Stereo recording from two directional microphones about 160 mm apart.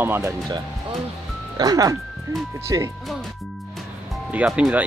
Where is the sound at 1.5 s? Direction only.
25° right (ahead or behind).